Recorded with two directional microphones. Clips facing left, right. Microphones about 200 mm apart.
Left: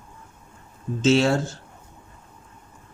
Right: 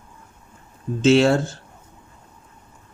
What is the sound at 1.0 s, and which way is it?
Speech, 60° right (ahead or behind).